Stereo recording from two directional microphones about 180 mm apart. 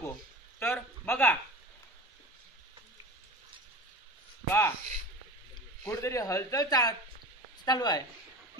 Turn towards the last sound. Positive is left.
turn(degrees=20)  # may be behind; listen again after turning